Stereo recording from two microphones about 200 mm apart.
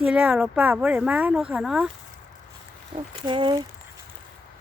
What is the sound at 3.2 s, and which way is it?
Speech, 25° right (ahead or behind).